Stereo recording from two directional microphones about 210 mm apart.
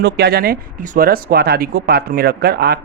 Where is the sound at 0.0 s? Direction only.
50° right (ahead or behind).